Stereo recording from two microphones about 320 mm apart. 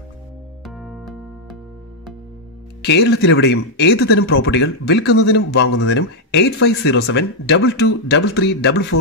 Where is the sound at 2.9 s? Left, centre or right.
Left.